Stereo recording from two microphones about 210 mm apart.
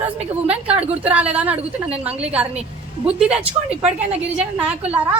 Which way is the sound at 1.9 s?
30° right (ahead or behind).